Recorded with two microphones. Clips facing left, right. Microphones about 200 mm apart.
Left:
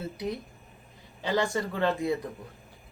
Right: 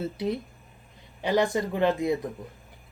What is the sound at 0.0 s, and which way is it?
Speech, 25° right (ahead or behind).